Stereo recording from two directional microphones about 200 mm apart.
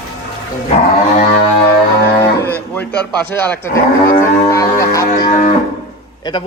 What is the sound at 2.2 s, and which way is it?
A man's voice, 10° left (ahead or behind).